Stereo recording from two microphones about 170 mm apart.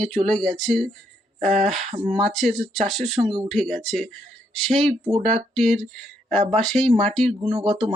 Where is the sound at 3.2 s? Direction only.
30° right (ahead or behind).